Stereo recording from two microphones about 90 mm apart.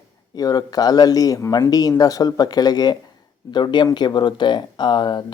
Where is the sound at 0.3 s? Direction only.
45° left (ahead or behind).